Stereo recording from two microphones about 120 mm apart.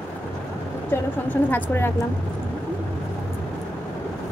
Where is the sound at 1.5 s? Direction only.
15° left (ahead or behind).